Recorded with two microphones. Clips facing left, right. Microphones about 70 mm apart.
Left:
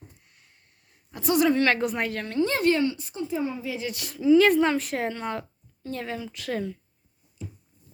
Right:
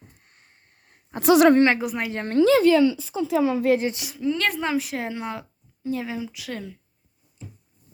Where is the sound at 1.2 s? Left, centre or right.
Right.